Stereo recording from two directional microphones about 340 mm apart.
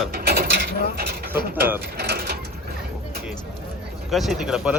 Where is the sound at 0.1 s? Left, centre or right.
Right.